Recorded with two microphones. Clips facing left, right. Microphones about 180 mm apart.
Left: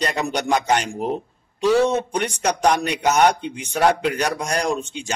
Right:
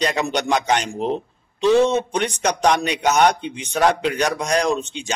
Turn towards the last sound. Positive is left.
turn(degrees=10)  # may be behind; listen again after turning